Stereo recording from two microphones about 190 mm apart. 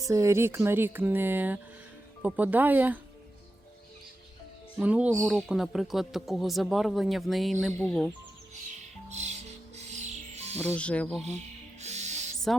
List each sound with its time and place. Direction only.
0.0 s a sound: 15° right (ahead or behind)
4.8 s a sound: 5° right (ahead or behind)
5.1 s speech: centre (ahead or behind)
9.0 s music: 35° right (ahead or behind)
10.8 s music: 5° left (ahead or behind)
11.3 s music: 35° right (ahead or behind)